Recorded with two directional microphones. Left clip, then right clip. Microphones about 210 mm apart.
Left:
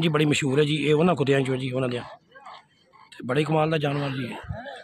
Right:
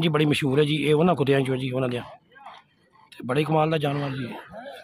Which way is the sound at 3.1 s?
Centre (ahead or behind).